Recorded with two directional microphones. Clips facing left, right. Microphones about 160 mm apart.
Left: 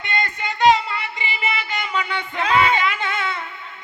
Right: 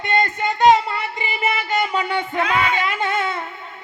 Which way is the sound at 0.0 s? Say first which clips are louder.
Right 6 dB; 45° right (ahead or behind).